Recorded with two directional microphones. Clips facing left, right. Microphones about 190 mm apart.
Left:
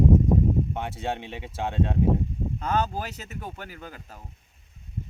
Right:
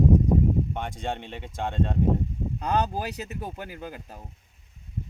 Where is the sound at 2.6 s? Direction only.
15° right (ahead or behind).